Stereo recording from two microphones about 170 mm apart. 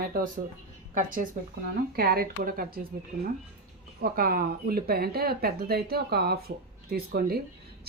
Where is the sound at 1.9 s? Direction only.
60° right (ahead or behind).